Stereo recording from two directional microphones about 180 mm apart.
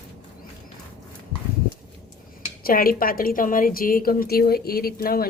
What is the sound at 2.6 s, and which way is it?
A woman's voice, 55° left (ahead or behind).